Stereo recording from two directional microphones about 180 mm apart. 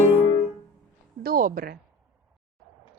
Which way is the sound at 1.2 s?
55° right (ahead or behind).